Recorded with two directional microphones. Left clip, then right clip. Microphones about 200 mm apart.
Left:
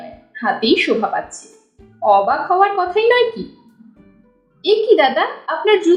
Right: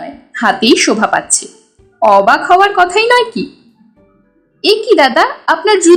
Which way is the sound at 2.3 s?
30° right (ahead or behind).